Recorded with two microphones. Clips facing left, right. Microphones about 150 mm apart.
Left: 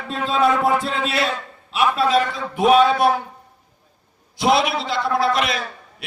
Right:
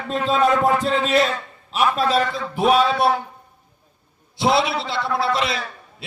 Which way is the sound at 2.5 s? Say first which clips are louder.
Left 3 dB; 35° right (ahead or behind).